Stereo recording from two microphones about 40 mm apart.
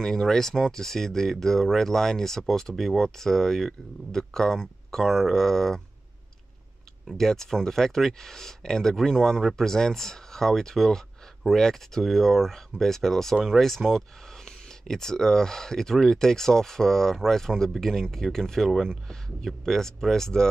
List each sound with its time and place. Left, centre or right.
0.0 s speech: centre
7.1 s speech: centre
9.4 s speech: centre
9.7 s speech: centre